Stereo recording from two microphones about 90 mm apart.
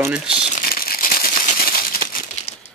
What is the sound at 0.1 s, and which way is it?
Speech, 10° right (ahead or behind).